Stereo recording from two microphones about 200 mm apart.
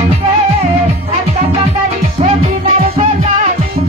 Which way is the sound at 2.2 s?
35° right (ahead or behind).